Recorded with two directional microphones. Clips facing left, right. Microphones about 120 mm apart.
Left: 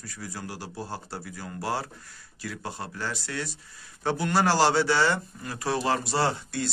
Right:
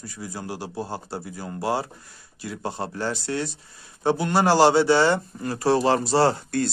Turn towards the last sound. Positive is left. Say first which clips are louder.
# right 6 dB
turn(degrees=-35)  # may be behind; listen again after turning